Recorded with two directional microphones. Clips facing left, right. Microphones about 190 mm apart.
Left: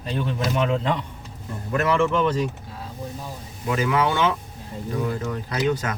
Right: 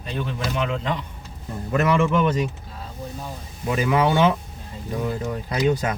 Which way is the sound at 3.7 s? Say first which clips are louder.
Right 2 dB; 15° right (ahead or behind).